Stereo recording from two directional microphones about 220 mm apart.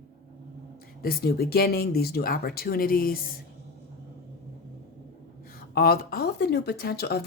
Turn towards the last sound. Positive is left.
turn(degrees=45)  # may be behind; listen again after turning